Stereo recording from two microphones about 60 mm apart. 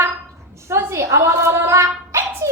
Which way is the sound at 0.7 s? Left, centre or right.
Right.